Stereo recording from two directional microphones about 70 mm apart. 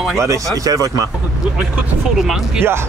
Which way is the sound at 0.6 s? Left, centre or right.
Right.